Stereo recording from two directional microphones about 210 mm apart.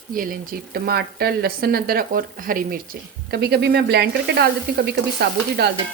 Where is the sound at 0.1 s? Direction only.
40° right (ahead or behind).